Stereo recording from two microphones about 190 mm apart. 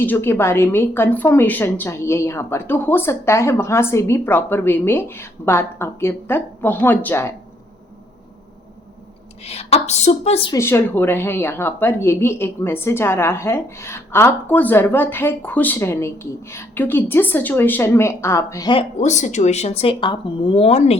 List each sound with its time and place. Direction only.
0.0 s speech: 10° left (ahead or behind)
9.4 s a woman's voice: 35° left (ahead or behind)
10.5 s speech: 15° left (ahead or behind)
18.9 s a woman's voice: 40° left (ahead or behind)